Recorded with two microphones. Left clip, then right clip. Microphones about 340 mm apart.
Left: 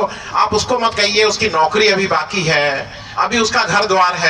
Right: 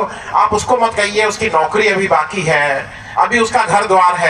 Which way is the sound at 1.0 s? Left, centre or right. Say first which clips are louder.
Left 1 dB; right.